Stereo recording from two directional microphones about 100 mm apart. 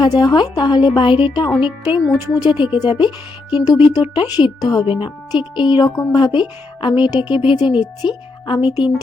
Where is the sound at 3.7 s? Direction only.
15° right (ahead or behind).